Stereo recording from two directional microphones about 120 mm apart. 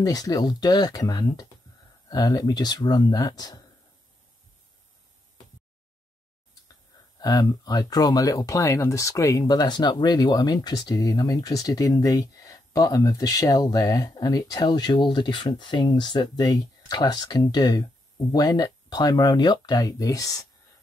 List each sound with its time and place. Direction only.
0.0 s speech: 30° left (ahead or behind)
7.2 s speech: 30° left (ahead or behind)
9.6 s speech: 40° left (ahead or behind)